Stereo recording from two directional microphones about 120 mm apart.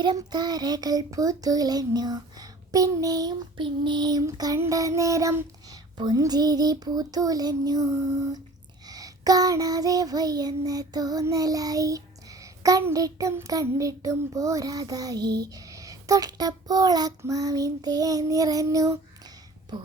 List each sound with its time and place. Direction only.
0.0 s child singing: 35° right (ahead or behind)